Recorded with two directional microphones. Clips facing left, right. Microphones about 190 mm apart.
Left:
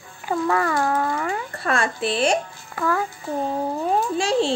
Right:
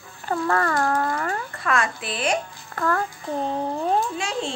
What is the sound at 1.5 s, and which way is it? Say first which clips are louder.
Speech: left 1 dB; 30° left (ahead or behind).